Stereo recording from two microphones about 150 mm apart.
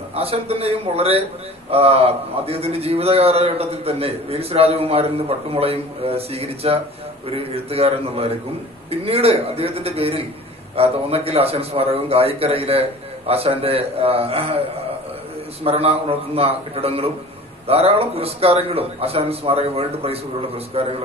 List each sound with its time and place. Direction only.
0.1 s a man's voice: 40° right (ahead or behind)
15.6 s a man's voice: 40° right (ahead or behind)